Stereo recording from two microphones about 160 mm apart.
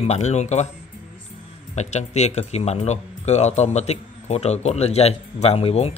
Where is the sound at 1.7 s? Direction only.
45° left (ahead or behind).